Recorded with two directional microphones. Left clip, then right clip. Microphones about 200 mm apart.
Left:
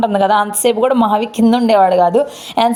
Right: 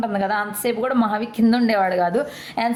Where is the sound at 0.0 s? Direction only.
30° left (ahead or behind).